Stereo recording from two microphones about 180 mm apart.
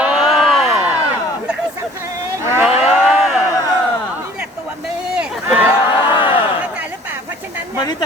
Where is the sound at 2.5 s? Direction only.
10° right (ahead or behind).